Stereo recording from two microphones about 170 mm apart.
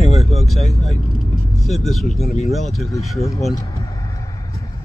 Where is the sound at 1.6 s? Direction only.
Centre (ahead or behind).